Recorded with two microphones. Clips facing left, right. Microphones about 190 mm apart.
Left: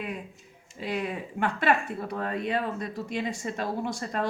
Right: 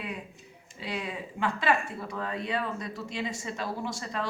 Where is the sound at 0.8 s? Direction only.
50° left (ahead or behind).